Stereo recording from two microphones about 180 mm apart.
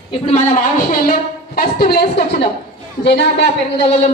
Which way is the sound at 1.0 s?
55° left (ahead or behind).